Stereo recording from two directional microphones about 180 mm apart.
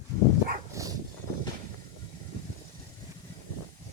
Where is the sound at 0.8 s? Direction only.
15° right (ahead or behind).